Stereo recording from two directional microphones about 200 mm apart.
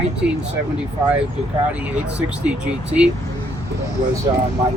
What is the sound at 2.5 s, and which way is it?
Speech, 5° right (ahead or behind).